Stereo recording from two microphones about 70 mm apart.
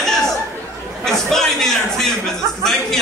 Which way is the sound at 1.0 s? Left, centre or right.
Centre.